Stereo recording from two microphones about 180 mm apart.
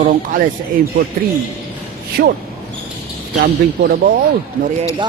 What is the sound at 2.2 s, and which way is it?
Speech, 60° right (ahead or behind).